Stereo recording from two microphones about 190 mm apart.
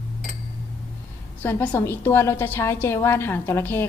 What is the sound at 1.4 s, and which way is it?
A woman's voice, 10° left (ahead or behind).